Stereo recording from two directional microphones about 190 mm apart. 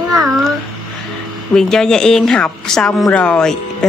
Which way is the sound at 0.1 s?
Centre (ahead or behind).